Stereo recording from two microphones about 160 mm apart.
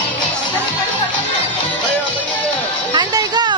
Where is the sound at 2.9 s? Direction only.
25° right (ahead or behind).